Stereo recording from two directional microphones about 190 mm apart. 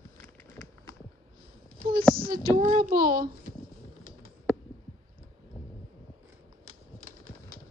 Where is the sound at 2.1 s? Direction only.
50° right (ahead or behind).